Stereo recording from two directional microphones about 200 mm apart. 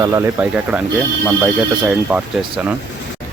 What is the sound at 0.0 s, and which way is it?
Speech, 15° right (ahead or behind).